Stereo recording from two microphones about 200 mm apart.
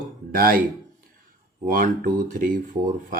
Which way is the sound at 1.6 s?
40° right (ahead or behind).